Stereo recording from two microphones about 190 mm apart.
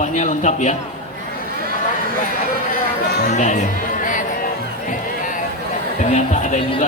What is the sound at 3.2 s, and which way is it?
Music, 40° left (ahead or behind).